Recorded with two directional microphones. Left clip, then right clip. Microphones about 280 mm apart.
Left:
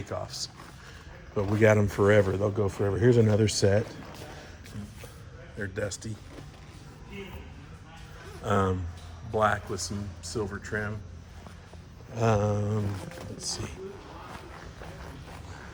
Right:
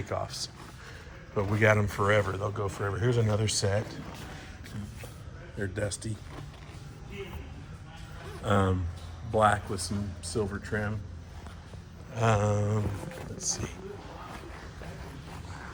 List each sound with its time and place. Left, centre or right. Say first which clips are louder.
0.0 s a sound: right 1 dB; centre
1.6 s speech: left 3 dB; centre; by 3.0 s left
3.1 s speech: left 7 dB; left
5.5 s speech: left 1 dB; centre
8.4 s speech: left 1 dB; centre
12.1 s a sound: left 1 dB; centre